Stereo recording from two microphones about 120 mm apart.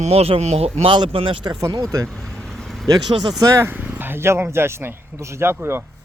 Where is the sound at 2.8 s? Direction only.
30° right (ahead or behind).